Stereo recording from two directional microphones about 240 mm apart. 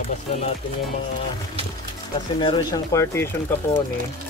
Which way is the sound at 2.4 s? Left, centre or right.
Centre.